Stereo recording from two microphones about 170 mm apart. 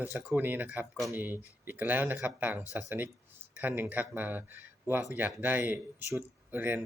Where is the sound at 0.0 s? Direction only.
10° right (ahead or behind).